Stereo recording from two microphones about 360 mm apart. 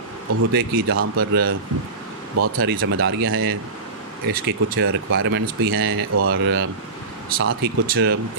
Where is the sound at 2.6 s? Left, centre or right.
Right.